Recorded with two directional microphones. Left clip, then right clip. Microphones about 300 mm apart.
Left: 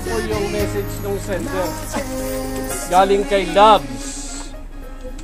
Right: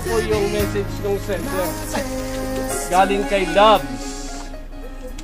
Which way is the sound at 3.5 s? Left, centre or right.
Left.